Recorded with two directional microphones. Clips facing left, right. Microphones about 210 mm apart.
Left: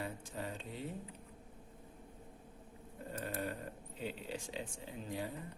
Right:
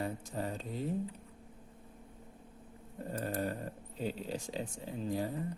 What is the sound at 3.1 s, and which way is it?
Speech, 40° right (ahead or behind).